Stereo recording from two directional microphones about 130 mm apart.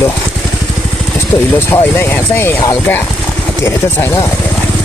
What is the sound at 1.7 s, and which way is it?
Speech, 20° left (ahead or behind).